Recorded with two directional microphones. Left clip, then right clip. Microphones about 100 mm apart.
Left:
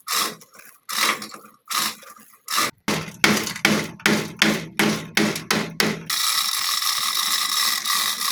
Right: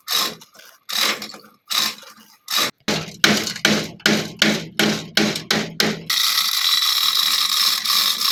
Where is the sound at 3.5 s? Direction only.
20° left (ahead or behind).